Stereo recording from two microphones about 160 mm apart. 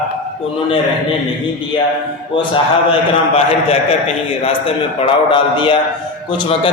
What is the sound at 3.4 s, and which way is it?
A man's voice, 40° left (ahead or behind).